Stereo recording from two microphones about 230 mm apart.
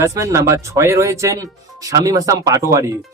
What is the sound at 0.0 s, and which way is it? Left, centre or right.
Speech, centre.